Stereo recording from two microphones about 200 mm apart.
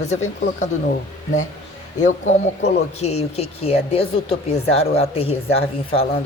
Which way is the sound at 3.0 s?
30° left (ahead or behind).